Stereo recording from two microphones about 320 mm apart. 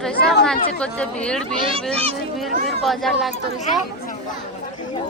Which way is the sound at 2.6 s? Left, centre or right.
Centre.